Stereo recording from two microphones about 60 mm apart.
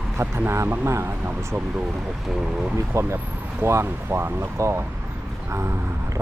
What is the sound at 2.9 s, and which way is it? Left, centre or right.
Speech, right.